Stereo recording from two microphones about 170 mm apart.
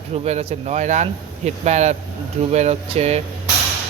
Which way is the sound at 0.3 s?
40° right (ahead or behind).